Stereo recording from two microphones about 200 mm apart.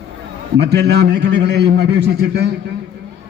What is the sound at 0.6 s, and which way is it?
A man's voice, 55° right (ahead or behind).